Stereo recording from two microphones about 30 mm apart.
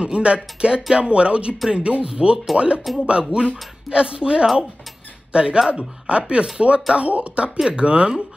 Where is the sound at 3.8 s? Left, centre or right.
Right.